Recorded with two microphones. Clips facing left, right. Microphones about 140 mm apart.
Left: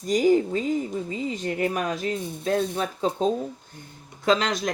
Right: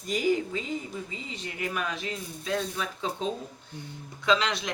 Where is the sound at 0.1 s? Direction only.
40° left (ahead or behind).